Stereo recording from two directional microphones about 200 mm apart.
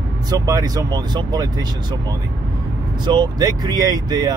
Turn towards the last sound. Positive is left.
turn(degrees=-20)  # may be behind; listen again after turning